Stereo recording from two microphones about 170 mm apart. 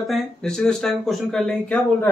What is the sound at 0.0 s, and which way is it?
Speech, centre (ahead or behind).